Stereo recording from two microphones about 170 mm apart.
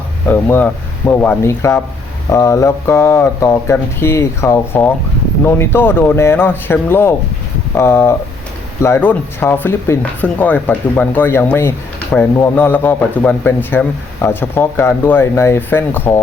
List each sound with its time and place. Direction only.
0.3 s a man's voice: 10° left (ahead or behind)